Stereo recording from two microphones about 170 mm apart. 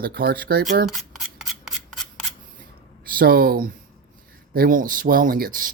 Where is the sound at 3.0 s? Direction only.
60° right (ahead or behind).